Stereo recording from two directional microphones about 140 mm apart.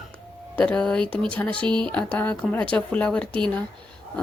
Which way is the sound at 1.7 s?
35° right (ahead or behind).